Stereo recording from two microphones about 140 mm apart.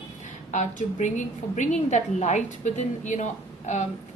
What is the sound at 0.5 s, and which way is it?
A woman's voice, 60° left (ahead or behind).